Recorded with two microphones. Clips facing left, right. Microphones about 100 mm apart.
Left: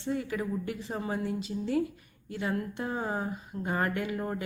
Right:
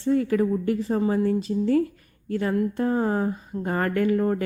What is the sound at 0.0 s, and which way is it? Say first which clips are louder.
Speech: right 10 dB; 45° right (ahead or behind).